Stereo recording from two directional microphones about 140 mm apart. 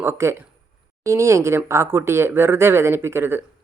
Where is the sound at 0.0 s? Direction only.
20° right (ahead or behind).